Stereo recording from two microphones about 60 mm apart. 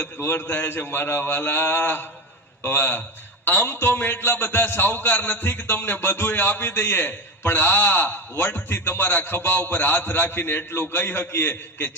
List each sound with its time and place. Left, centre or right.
0.2 s a man's voice: left